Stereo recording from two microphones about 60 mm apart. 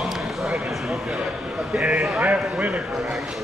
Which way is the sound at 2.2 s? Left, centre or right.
Right.